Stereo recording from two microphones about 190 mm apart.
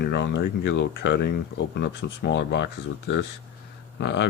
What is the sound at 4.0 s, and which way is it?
Speech, 65° left (ahead or behind).